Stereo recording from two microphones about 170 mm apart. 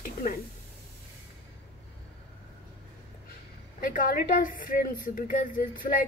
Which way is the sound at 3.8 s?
55° left (ahead or behind).